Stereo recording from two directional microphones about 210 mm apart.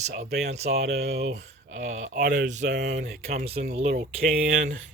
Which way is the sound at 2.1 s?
50° right (ahead or behind).